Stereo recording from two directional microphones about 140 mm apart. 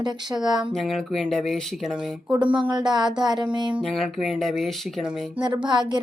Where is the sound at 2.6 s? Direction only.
30° right (ahead or behind).